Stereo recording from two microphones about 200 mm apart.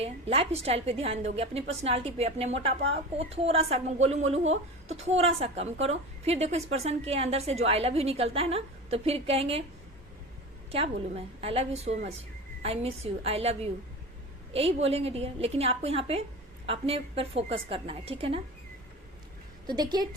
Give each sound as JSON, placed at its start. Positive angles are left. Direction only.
{"t": 0.0, "sound": "a woman's voice", "side_deg": -30}
{"t": 10.7, "sound": "a woman's voice", "side_deg": -30}
{"t": 19.6, "sound": "a woman's voice", "side_deg": -20}